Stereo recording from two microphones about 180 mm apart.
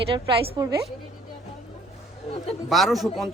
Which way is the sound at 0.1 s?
30° right (ahead or behind).